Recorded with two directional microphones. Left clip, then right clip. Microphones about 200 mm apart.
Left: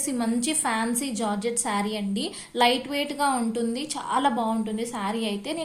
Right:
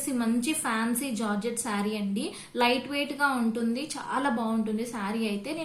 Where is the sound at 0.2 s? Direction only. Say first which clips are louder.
Left 2 dB; 30° left (ahead or behind).